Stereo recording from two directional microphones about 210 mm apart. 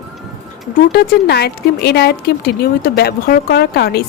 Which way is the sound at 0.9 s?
50° left (ahead or behind).